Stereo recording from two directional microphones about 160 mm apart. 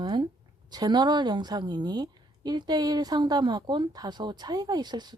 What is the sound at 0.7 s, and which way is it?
A woman's voice, 25° right (ahead or behind).